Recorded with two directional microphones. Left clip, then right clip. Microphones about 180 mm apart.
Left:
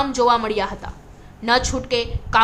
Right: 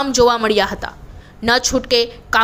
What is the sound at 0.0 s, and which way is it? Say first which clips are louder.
A woman's voice: right 3 dB; 25° right (ahead or behind).